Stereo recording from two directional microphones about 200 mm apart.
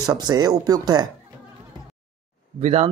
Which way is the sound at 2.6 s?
30° right (ahead or behind).